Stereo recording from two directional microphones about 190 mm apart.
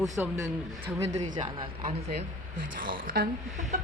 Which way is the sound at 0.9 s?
35° right (ahead or behind).